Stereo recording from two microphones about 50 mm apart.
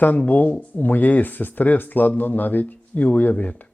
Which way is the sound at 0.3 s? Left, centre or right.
Left.